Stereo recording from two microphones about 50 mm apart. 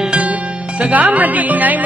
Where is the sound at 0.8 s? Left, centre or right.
Right.